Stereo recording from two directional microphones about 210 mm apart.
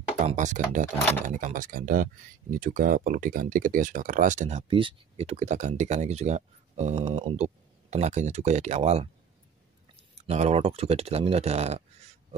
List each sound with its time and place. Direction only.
0.3 s speech: 35° right (ahead or behind)
10.1 s speech: 30° right (ahead or behind)